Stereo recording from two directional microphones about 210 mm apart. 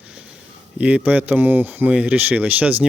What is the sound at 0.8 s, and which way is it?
A man's voice, 5° right (ahead or behind).